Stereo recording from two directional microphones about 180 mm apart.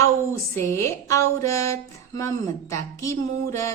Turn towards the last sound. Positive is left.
turn(degrees=15)  # may be behind; listen again after turning